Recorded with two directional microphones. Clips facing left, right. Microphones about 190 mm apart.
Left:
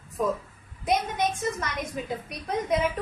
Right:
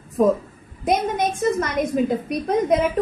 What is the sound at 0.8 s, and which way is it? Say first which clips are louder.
A woman's voice: right 5 dB; 45° right (ahead or behind).